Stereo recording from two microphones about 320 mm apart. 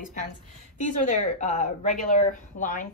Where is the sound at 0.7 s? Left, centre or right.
Left.